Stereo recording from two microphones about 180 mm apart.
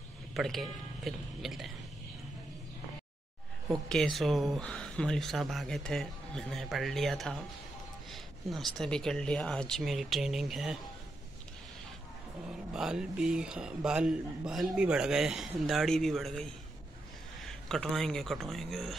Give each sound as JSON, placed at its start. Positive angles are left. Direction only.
{"t": 0.3, "sound": "speech", "side_deg": 0}
{"t": 3.9, "sound": "speech", "side_deg": 0}
{"t": 12.4, "sound": "speech", "side_deg": -5}